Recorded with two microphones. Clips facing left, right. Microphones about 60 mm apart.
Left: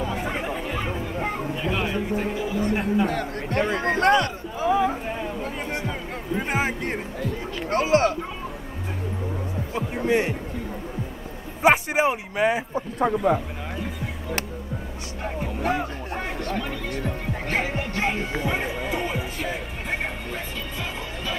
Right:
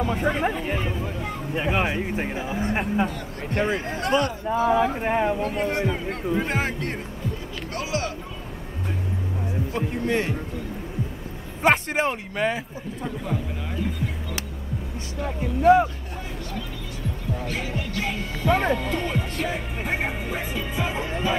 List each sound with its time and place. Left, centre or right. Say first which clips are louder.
1.6 s a sound: right 4 dB; right
3.1 s a man's voice: left 5 dB; left
4.5 s speech: right 4 dB; right
5.0 s speech: right 7 dB; right
6.4 s speech: left 1 dB; centre
7.7 s speech: left 9 dB; left
10.0 s speech: left 4 dB; centre
11.6 s speech: left 2 dB; centre
13.0 s speech: left 9 dB; left
15.2 s speech: right 8 dB; left
16.4 s music: left 6 dB; left
18.8 s music: even; centre